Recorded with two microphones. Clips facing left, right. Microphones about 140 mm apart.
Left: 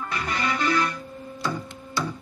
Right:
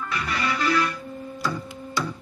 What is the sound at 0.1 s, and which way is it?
Music, 35° left (ahead or behind).